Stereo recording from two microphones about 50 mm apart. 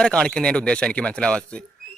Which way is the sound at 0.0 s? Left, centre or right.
Centre.